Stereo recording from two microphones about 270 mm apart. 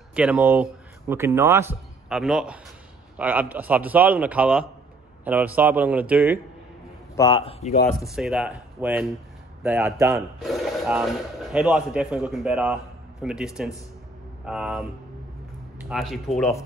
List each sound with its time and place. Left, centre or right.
0.1 s a man's voice: centre
7.2 s speech: centre
8.1 s a man's voice: centre
10.4 s a man's voice: centre